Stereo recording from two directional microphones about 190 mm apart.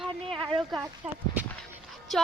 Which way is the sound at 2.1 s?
Centre (ahead or behind).